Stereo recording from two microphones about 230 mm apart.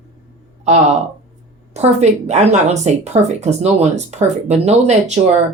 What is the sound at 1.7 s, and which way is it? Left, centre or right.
Speech, right.